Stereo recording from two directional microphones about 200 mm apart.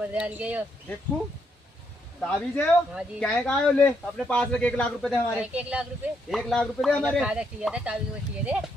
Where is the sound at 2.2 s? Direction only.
5° left (ahead or behind).